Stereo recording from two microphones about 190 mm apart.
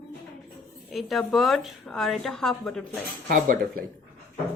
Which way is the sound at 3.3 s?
45° right (ahead or behind).